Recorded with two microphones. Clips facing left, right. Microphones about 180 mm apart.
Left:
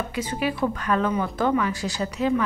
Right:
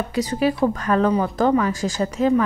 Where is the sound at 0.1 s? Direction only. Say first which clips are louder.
Right 6 dB; 40° right (ahead or behind).